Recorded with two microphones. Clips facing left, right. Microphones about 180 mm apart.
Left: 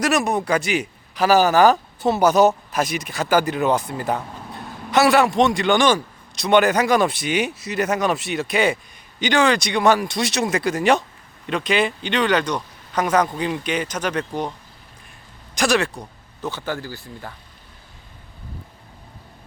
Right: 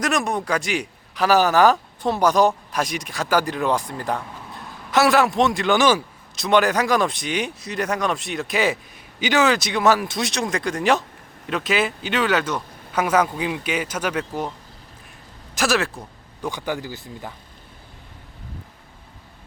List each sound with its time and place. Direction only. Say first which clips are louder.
0.0 s speech: left 3 dB; 5° left (ahead or behind)
15.5 s speech: left 2 dB; 5° right (ahead or behind)
16.5 s speech: right 1 dB; 15° right (ahead or behind)